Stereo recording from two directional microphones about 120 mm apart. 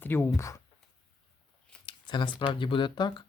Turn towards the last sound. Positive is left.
turn(degrees=40)  # may be behind; listen again after turning